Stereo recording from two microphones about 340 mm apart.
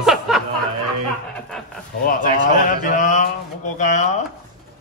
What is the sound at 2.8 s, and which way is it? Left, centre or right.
Mantra, left.